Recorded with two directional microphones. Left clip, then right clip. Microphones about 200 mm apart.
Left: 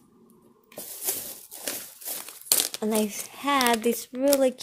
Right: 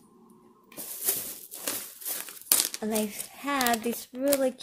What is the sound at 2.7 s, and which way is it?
A woman's voice, 40° left (ahead or behind).